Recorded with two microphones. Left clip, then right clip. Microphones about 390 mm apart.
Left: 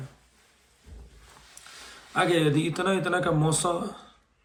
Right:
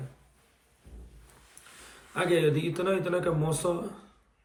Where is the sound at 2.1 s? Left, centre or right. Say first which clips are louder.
Left 2 dB; centre.